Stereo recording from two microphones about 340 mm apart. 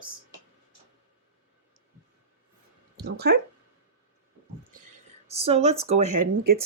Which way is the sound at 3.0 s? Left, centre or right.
Right.